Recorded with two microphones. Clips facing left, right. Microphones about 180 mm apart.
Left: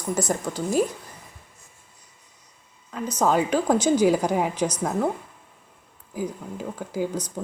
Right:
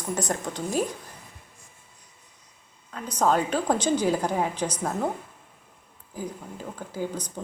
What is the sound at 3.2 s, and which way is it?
A woman's voice, 10° left (ahead or behind).